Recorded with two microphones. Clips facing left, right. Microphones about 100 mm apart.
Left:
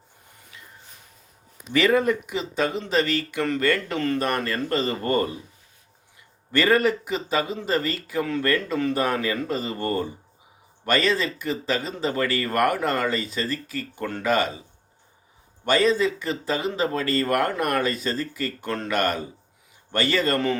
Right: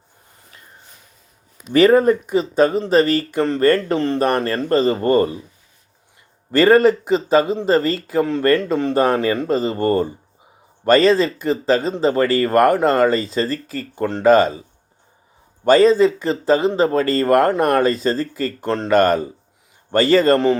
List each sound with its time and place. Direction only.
0.5 s a sound: 45° right (ahead or behind)
1.7 s speech: 40° right (ahead or behind)
6.5 s speech: 35° right (ahead or behind)
15.6 s speech: 35° right (ahead or behind)